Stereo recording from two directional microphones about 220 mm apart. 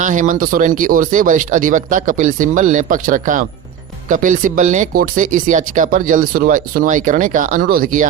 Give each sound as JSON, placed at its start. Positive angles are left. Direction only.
{"t": 0.0, "sound": "speech", "side_deg": -35}